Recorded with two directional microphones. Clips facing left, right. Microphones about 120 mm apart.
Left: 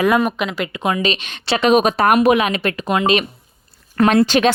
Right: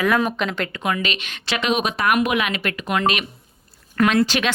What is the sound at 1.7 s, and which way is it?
Speech, 45° left (ahead or behind).